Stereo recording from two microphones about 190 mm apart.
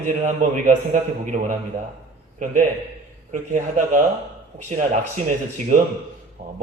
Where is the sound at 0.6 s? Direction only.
40° right (ahead or behind).